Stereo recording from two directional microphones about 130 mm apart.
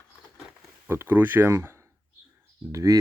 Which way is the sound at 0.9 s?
15° right (ahead or behind).